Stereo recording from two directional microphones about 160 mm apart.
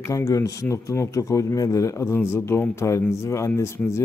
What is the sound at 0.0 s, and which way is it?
Speech, 20° left (ahead or behind).